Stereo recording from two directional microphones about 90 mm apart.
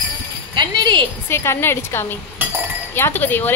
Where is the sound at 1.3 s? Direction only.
30° left (ahead or behind).